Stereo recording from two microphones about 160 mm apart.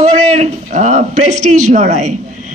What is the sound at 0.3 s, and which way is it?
A woman's voice, 45° right (ahead or behind).